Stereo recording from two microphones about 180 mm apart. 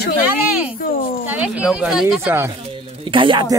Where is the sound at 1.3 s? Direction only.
10° right (ahead or behind).